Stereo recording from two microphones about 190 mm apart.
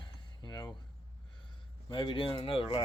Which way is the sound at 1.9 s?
25° left (ahead or behind).